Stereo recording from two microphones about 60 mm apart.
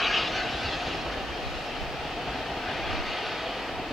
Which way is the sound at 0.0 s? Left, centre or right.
Centre.